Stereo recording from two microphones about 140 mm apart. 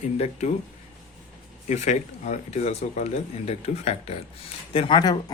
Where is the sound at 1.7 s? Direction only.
55° left (ahead or behind).